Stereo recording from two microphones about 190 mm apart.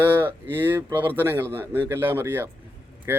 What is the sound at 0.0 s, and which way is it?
Speech, 10° right (ahead or behind).